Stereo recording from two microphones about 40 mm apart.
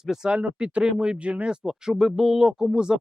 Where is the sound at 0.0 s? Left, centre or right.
Centre.